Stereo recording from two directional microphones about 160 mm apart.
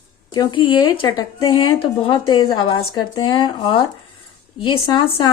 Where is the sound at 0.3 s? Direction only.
30° left (ahead or behind).